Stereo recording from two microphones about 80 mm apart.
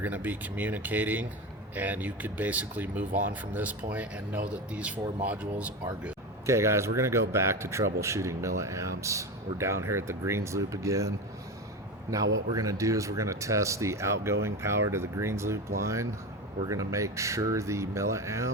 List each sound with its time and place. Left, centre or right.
0.0 s speech: right
6.4 s speech: right
12.1 s a man's voice: right